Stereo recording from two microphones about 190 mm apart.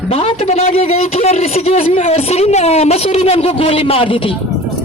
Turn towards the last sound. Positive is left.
turn(degrees=25)  # may be behind; listen again after turning